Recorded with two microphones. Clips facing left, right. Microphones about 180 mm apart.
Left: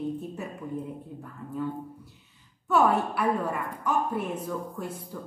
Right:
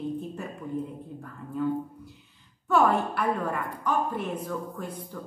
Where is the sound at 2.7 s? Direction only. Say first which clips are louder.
Even; 5° left (ahead or behind).